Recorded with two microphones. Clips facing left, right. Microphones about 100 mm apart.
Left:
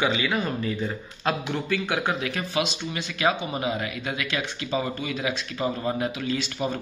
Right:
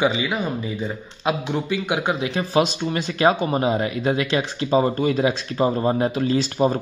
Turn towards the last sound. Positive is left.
turn(degrees=-35)  # may be behind; listen again after turning